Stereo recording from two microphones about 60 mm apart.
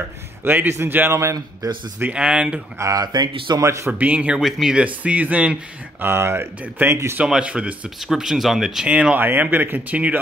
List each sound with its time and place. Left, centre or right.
0.4 s a man's voice: right
1.2 s a man's voice: right
2.1 s speech: centre
2.8 s speech: right
3.5 s a man's voice: right
4.0 s speech: right
4.4 s speech: centre
4.7 s speech: right
5.9 s a man's voice: right
7.4 s speech: right
8.1 s speech: centre
8.8 s speech: centre
9.2 s speech: right